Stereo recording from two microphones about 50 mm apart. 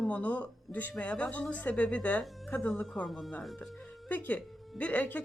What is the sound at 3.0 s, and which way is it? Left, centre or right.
Speech, centre.